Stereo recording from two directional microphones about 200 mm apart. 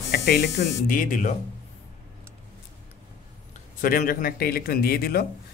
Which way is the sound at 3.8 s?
45° left (ahead or behind).